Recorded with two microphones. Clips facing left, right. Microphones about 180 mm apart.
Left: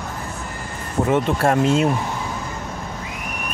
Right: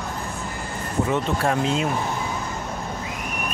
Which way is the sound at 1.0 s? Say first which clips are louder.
Left 6 dB; 50° left (ahead or behind).